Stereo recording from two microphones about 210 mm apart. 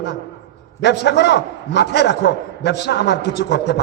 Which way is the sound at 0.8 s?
50° left (ahead or behind).